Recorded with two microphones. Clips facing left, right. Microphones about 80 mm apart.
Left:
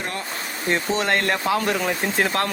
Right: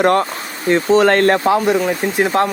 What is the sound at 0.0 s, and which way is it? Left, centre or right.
Speech, right.